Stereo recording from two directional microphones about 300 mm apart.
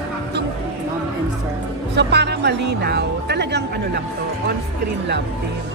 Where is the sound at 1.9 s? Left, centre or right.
Right.